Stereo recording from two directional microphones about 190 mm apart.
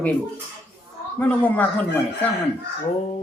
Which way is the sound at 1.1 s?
10° left (ahead or behind).